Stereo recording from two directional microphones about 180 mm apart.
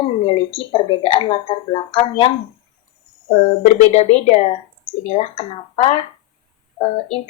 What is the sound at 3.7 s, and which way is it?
Speech, 35° left (ahead or behind).